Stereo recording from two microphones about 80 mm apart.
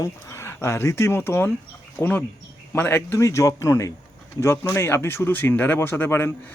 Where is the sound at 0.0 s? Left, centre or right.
Left.